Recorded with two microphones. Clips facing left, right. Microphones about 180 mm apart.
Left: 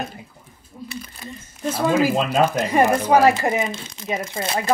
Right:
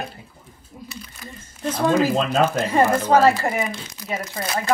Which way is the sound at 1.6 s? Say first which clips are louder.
Even; 5° left (ahead or behind).